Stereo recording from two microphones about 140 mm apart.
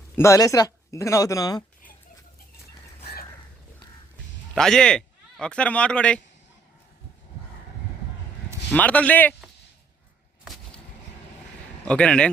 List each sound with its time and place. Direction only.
0.2 s speech: 20° left (ahead or behind)
4.5 s speech: 5° left (ahead or behind)
8.7 s a man's voice: 10° left (ahead or behind)
10.4 s a sound: centre (ahead or behind)
11.9 s a man's voice: 10° left (ahead or behind)